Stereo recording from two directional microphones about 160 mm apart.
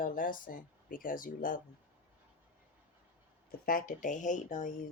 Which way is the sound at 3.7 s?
55° left (ahead or behind).